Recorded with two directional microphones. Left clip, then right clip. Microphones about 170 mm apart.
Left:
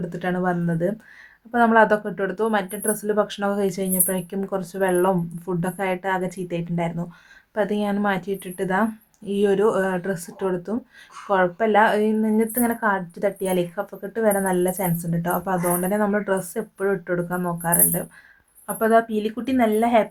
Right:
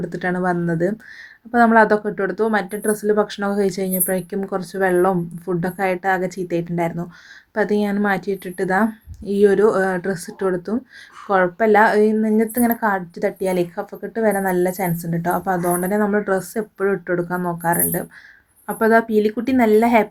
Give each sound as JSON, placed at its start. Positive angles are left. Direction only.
{"t": 0.0, "sound": "a woman's voice", "side_deg": -20}